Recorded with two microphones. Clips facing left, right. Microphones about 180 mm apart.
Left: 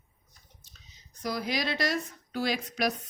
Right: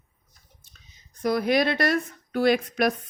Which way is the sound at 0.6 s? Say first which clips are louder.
Even; 55° right (ahead or behind).